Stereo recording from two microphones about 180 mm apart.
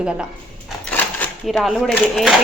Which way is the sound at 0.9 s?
10° left (ahead or behind).